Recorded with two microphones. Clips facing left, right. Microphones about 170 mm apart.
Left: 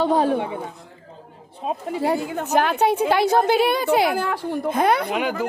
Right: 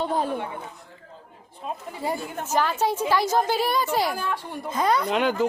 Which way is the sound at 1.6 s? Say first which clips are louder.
Left 7 dB; 85° left.